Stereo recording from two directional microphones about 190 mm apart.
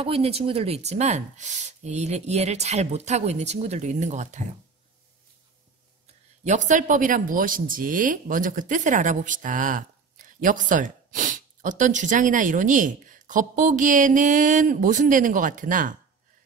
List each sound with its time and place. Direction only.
0.0 s speech: 30° right (ahead or behind)
6.4 s speech: 40° right (ahead or behind)